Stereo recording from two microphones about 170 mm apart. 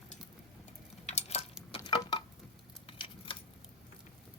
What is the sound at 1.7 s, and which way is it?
Patter, 25° left (ahead or behind).